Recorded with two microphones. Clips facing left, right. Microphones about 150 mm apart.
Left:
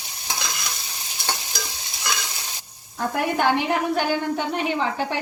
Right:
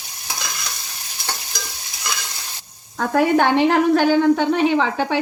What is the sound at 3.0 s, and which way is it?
A woman's voice, 75° right (ahead or behind).